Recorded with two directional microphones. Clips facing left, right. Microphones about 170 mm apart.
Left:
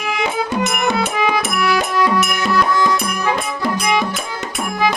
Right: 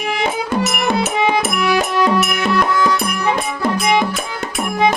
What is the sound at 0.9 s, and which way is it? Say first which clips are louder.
Music: right 2 dB; 25° right (ahead or behind).